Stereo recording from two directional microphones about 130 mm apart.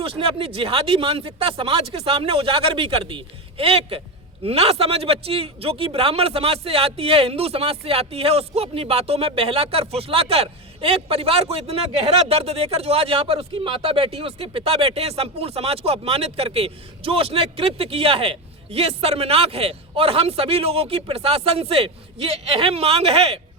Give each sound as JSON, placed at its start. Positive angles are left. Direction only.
{"t": 0.0, "sound": "a man's voice", "side_deg": -45}